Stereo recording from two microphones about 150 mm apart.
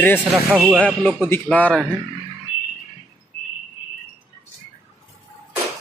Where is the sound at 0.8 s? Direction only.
10° left (ahead or behind).